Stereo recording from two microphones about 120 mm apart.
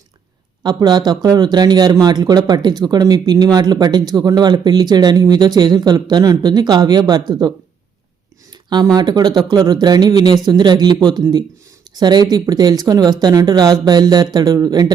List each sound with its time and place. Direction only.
0.6 s a man's voice: 35° right (ahead or behind)
8.7 s a man's voice: 35° right (ahead or behind)